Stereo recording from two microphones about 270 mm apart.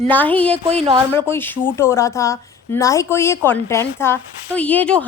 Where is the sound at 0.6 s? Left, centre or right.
Right.